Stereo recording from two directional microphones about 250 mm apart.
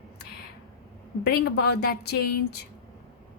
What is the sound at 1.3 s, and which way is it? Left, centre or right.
Speech, left.